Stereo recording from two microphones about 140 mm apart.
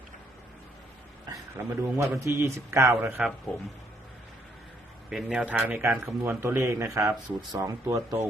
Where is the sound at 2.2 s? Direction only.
20° right (ahead or behind).